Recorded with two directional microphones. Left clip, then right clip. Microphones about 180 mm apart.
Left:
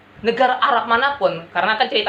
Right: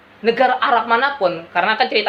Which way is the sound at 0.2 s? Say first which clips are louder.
Right 1 dB; 30° right (ahead or behind).